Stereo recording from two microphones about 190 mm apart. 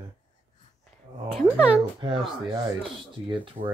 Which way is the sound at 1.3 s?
5° right (ahead or behind).